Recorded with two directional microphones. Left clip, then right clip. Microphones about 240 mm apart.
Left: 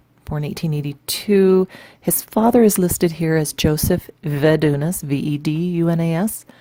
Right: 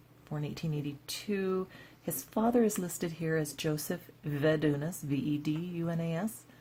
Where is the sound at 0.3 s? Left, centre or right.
Left.